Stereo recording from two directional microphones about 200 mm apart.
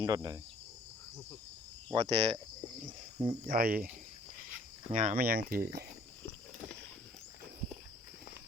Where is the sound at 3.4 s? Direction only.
45° right (ahead or behind).